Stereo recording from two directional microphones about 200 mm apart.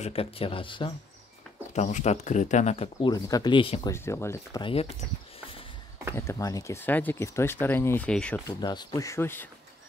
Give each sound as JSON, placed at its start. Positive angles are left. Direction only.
{"t": 0.0, "sound": "speech", "side_deg": 30}
{"t": 1.7, "sound": "speech", "side_deg": 35}
{"t": 3.9, "sound": "speech", "side_deg": 15}
{"t": 6.1, "sound": "speech", "side_deg": 15}
{"t": 8.5, "sound": "speech", "side_deg": 20}